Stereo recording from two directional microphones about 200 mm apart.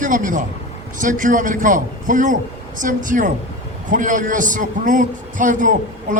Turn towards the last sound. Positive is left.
turn(degrees=-40)  # may be behind; listen again after turning